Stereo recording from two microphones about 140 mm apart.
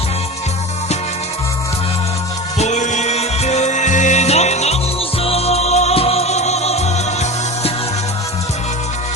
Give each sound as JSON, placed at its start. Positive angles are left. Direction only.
{"t": 2.6, "sound": "music", "side_deg": 55}